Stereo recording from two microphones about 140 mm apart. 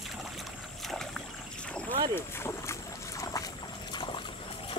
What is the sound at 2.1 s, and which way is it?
Boat, 20° left (ahead or behind).